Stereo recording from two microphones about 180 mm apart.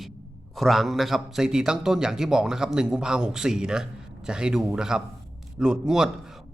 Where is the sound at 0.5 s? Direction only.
Centre (ahead or behind).